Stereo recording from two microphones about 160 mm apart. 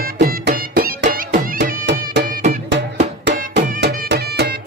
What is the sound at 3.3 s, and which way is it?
Music, 90° right.